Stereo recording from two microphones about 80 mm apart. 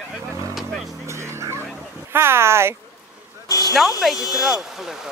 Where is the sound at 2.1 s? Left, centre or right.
Right.